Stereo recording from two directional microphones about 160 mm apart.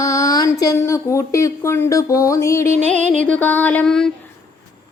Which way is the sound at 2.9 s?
50° right (ahead or behind).